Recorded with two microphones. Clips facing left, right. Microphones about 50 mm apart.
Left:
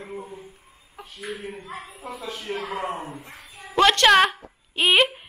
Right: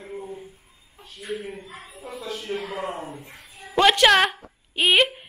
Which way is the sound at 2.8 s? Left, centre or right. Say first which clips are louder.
Left 1 dB; centre.